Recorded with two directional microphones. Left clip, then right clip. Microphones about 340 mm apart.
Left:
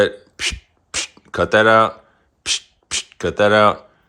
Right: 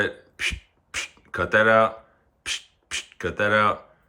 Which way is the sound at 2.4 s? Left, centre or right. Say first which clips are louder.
Left 8 dB; centre.